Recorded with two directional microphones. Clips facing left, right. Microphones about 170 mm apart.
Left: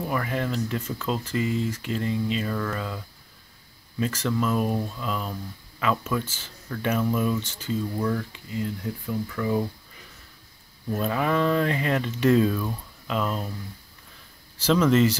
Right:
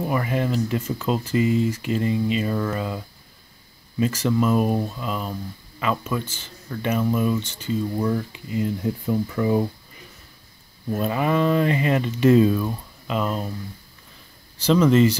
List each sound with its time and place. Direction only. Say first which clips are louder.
0.0 s speech: right 4 dB; 10° right (ahead or behind)
4.0 s speech: right 5 dB; 10° right (ahead or behind)
7.9 s speech: right 3 dB; 15° right (ahead or behind)
10.9 s speech: right 2 dB; 5° right (ahead or behind)
14.6 s speech: right 3 dB; centre (ahead or behind)